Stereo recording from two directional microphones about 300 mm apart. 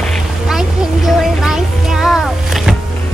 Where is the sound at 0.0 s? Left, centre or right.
Centre.